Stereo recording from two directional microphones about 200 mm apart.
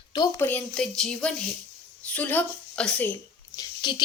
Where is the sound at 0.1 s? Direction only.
15° left (ahead or behind).